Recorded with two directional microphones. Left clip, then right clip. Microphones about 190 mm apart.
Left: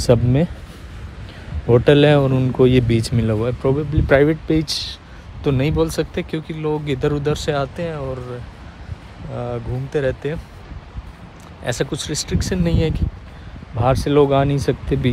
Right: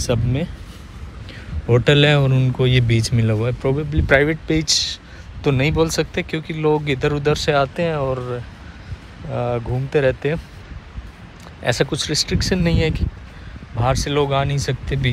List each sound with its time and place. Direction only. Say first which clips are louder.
0.0 s speech: left 6 dB; 35° left (ahead or behind)
1.7 s speech: left 2 dB; 20° left (ahead or behind)
11.6 s speech: right 3 dB; 15° left (ahead or behind)
13.7 s speech: left 4 dB; 30° left (ahead or behind)